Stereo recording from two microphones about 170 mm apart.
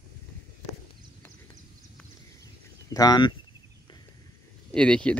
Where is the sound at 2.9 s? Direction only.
25° left (ahead or behind).